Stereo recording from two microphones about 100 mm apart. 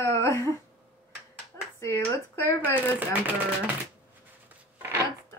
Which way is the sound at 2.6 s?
15° right (ahead or behind).